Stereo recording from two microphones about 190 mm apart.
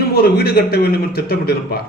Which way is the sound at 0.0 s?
55° left (ahead or behind).